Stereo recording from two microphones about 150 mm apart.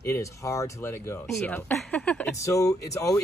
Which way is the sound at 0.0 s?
20° left (ahead or behind).